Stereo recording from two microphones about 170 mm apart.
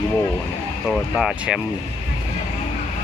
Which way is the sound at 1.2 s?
5° right (ahead or behind).